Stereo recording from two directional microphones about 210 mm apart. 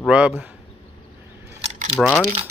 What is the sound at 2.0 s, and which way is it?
Speech, 5° left (ahead or behind).